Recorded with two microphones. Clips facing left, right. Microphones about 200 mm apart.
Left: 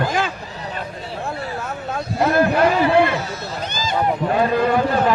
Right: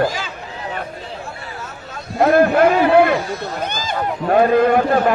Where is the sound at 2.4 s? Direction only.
60° right (ahead or behind).